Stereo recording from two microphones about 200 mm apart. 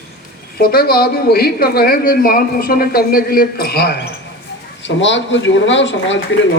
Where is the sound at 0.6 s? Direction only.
50° left (ahead or behind).